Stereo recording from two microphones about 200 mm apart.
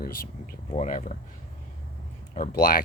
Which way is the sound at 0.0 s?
45° left (ahead or behind).